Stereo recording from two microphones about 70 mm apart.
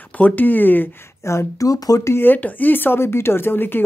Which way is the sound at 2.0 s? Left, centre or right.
Left.